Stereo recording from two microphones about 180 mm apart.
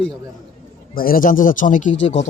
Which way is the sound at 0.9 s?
55° left (ahead or behind).